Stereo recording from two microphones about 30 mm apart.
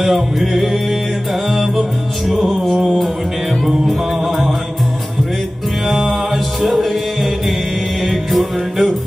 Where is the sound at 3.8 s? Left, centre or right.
Centre.